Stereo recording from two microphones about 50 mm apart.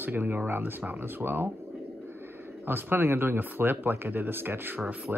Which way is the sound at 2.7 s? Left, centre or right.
Right.